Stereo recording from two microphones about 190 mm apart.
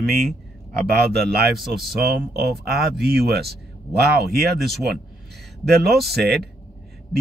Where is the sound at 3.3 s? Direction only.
55° right (ahead or behind).